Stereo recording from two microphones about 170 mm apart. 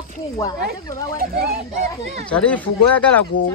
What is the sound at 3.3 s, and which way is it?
Speech, 90° left.